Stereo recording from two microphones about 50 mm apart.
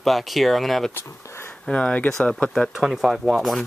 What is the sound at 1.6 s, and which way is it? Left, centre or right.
Speech, centre.